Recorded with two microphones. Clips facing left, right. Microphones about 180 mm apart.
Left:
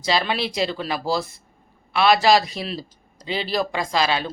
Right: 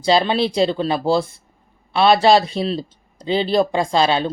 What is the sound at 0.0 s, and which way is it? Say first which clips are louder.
A man's voice: right 6 dB; 30° right (ahead or behind).